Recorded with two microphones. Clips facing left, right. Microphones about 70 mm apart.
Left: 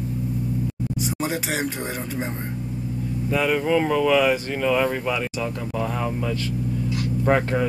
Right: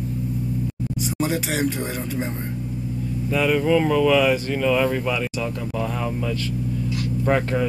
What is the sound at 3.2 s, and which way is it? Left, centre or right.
Speech, left.